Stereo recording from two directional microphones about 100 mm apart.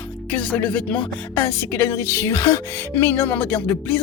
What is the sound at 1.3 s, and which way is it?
A woman's voice, 25° left (ahead or behind).